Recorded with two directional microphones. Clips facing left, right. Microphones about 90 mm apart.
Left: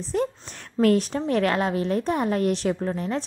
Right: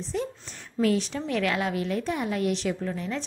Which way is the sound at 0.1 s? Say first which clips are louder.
Left 6 dB; 55° left (ahead or behind).